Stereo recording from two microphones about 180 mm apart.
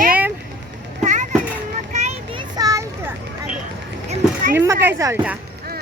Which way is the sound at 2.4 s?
20° right (ahead or behind).